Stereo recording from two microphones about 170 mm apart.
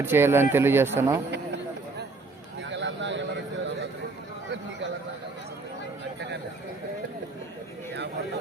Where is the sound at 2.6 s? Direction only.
90° right.